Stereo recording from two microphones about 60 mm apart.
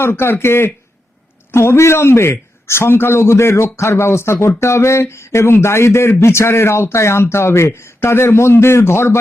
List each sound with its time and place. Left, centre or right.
0.0 s a man's voice: left